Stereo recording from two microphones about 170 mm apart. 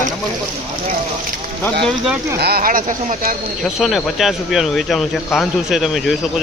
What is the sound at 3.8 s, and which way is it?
Speech, centre (ahead or behind).